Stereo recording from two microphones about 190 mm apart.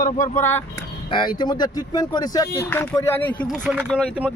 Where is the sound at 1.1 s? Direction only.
25° left (ahead or behind).